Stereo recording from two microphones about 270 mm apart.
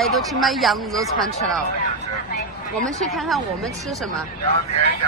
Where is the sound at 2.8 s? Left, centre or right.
Centre.